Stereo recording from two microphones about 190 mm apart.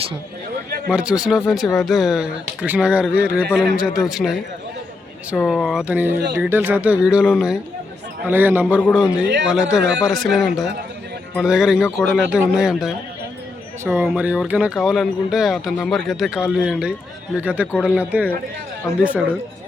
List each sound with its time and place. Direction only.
0.9 s speech: 5° right (ahead or behind)
5.5 s speech: centre (ahead or behind)
9.2 s speech: 65° right (ahead or behind)
10.1 s speech: centre (ahead or behind)